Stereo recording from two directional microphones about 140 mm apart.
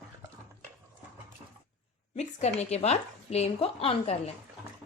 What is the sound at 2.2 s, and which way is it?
A woman's voice, 50° left (ahead or behind).